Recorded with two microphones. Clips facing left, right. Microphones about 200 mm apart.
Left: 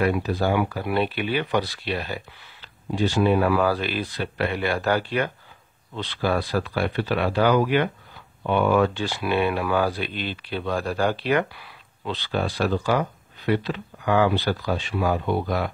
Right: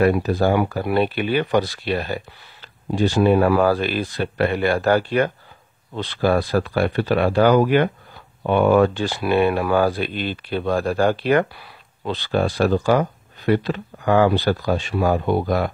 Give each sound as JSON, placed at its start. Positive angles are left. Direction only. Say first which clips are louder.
{"t": 0.0, "sound": "speech", "louder": "right 5 dB", "side_deg": -45}